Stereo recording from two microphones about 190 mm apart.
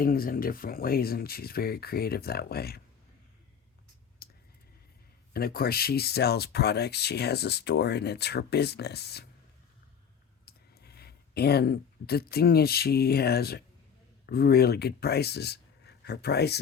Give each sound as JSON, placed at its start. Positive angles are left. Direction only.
{"t": 0.0, "sound": "speech", "side_deg": 50}
{"t": 4.2, "sound": "a sound", "side_deg": 55}
{"t": 5.3, "sound": "speech", "side_deg": 55}
{"t": 10.4, "sound": "speech", "side_deg": 55}